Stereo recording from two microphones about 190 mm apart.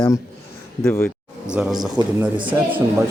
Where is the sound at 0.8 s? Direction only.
10° left (ahead or behind).